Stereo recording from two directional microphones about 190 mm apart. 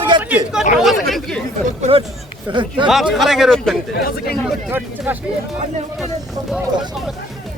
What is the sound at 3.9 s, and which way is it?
Speech, 55° left (ahead or behind).